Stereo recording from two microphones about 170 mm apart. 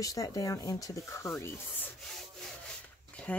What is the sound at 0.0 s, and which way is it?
Speech, 20° left (ahead or behind).